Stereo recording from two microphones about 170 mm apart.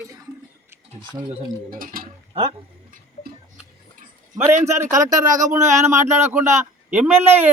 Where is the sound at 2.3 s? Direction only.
35° right (ahead or behind).